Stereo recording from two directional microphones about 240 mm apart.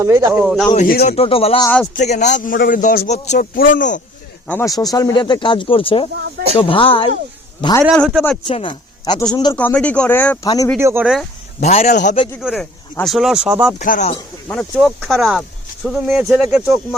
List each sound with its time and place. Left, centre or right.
0.0 s speech: centre
0.7 s a man's voice: left
1.6 s speech: centre
2.0 s a man's voice: left
4.4 s a man's voice: centre
7.9 s speech: centre
8.4 s speech: left
9.6 s speech: centre
10.8 s speech: centre
11.6 s a man's voice: left
12.4 s speech: centre
13.7 s a man's voice: left
14.1 s speech: centre